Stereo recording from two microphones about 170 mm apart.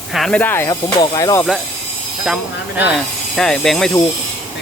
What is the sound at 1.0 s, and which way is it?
Speech, 20° left (ahead or behind).